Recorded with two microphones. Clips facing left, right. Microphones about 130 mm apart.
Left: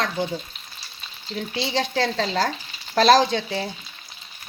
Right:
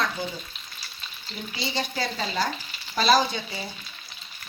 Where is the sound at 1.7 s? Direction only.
90° left.